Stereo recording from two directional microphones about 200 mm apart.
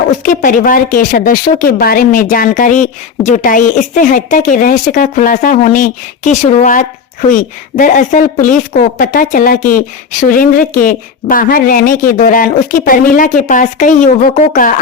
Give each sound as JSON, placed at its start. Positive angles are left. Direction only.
{"t": 0.2, "sound": "speech", "side_deg": 45}